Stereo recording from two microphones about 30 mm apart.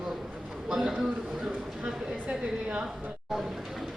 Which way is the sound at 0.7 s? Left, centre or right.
Centre.